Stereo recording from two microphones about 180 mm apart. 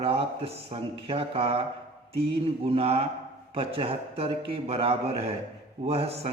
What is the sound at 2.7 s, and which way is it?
Speech, 35° right (ahead or behind).